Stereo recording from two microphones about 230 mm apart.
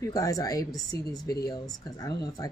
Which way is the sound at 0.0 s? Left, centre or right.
Centre.